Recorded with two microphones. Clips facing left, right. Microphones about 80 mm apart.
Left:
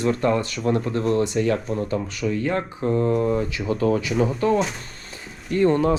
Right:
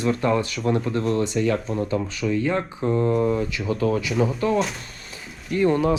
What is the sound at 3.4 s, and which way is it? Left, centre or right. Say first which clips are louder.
Speech: left 1 dB; left.